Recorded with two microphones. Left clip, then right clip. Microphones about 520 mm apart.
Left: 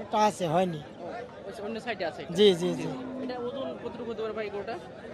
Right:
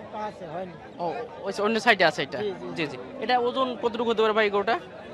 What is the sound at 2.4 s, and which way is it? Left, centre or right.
Speech, left.